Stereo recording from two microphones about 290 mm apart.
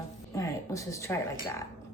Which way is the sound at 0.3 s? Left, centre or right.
Centre.